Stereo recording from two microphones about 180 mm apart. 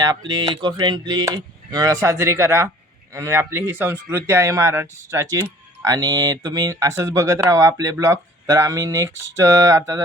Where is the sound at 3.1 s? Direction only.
15° right (ahead or behind).